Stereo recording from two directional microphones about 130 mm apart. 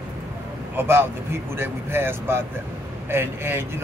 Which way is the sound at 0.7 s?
15° right (ahead or behind).